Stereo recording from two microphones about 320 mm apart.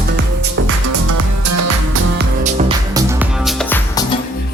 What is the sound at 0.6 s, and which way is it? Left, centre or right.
Music, right.